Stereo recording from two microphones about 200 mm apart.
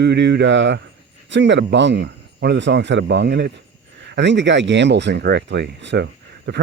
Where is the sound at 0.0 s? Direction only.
60° right (ahead or behind).